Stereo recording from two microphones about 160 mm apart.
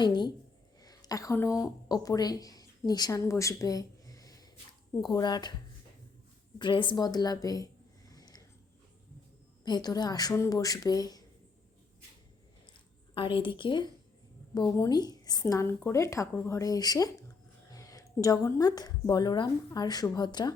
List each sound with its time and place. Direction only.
0.0 s speech: 30° left (ahead or behind)
6.6 s speech: 30° left (ahead or behind)
8.1 s a sound: 25° left (ahead or behind)
9.6 s speech: 25° left (ahead or behind)
13.1 s speech: 35° left (ahead or behind)